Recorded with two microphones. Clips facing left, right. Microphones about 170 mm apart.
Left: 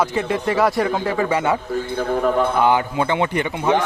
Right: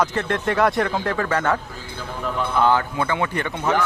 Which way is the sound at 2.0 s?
55° left (ahead or behind).